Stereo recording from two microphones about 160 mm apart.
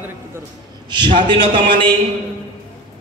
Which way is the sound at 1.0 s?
30° right (ahead or behind).